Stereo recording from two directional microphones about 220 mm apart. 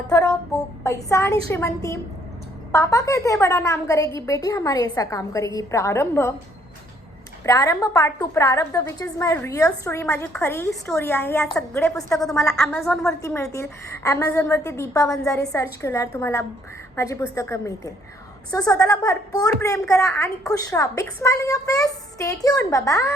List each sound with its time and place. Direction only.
0.1 s a sound: 15° left (ahead or behind)
0.9 s a woman's voice: 15° left (ahead or behind)
7.4 s a woman's voice: 15° left (ahead or behind)